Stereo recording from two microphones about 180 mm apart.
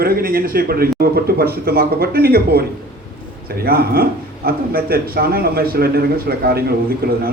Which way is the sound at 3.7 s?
55° right (ahead or behind).